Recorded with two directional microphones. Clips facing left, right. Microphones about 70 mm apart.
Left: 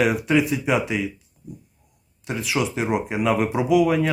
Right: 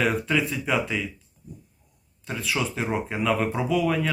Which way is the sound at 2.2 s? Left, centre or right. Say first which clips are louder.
Left 4 dB; centre.